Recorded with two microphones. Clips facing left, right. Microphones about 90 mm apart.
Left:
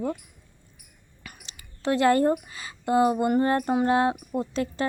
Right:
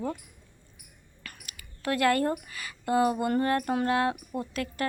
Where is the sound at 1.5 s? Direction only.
25° left (ahead or behind).